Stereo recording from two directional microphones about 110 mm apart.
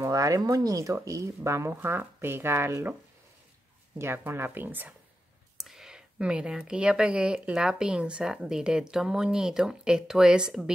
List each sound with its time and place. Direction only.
0.0 s speech: 30° right (ahead or behind)
4.0 s speech: 20° right (ahead or behind)
5.6 s speech: 5° right (ahead or behind)